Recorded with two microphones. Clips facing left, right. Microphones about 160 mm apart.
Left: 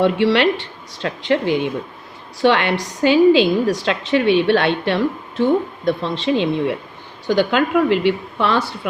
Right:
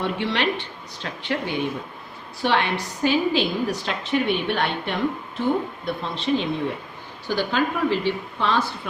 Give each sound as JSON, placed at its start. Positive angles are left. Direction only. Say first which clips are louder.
{"t": 0.0, "sound": "a woman's voice", "louder": "left 9 dB", "side_deg": 85}
{"t": 2.4, "sound": "a woman's voice", "louder": "left 6 dB", "side_deg": 75}
{"t": 7.3, "sound": "a woman's voice", "louder": "left 7 dB", "side_deg": 70}